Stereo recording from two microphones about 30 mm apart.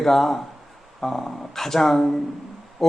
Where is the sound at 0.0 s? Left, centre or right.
Centre.